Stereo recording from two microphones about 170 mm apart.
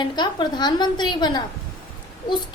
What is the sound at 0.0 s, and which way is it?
A woman's voice, 25° left (ahead or behind).